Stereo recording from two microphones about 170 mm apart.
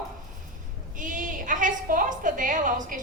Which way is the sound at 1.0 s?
50° right (ahead or behind).